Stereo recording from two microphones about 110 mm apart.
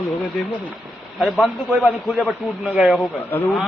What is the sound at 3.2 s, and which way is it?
Speech, 15° left (ahead or behind).